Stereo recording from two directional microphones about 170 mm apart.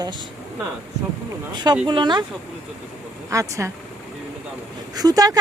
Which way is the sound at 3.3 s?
20° right (ahead or behind).